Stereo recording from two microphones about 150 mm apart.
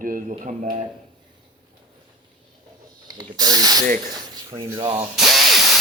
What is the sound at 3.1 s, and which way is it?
Speech, 25° right (ahead or behind).